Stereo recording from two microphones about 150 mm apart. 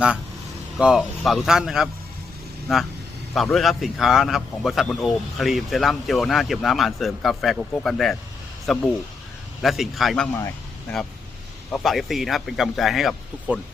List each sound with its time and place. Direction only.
0.8 s a man's voice: 5° right (ahead or behind)
10.3 s a sound: 15° left (ahead or behind)
11.7 s a man's voice: centre (ahead or behind)